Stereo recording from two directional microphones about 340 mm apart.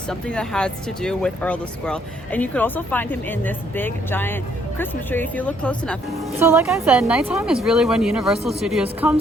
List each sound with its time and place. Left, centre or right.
0.1 s speech: centre
6.4 s a woman's voice: centre